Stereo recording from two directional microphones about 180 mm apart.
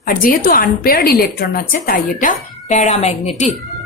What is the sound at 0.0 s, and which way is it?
A woman's voice, 50° left (ahead or behind).